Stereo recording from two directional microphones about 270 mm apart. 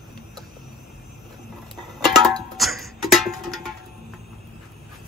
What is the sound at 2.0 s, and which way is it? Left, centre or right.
Music, centre.